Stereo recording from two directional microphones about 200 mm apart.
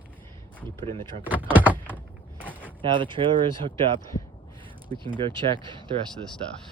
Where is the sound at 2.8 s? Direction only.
25° right (ahead or behind).